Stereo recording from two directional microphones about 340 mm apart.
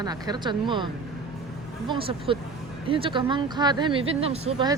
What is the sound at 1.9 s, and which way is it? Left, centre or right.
Speech, centre.